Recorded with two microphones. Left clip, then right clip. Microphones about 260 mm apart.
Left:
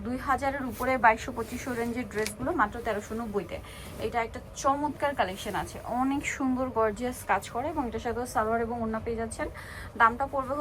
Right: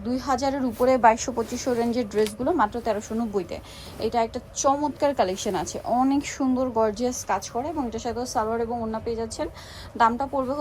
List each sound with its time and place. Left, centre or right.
0.1 s a woman's voice: centre
4.6 s a woman's voice: centre